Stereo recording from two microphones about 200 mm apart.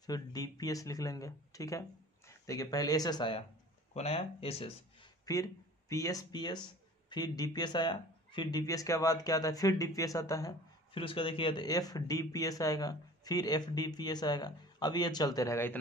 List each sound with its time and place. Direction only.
0.0 s speech: 20° left (ahead or behind)
5.2 s speech: 15° left (ahead or behind)